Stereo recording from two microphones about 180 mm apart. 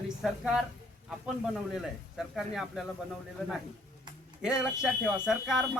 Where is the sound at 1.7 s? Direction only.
5° right (ahead or behind).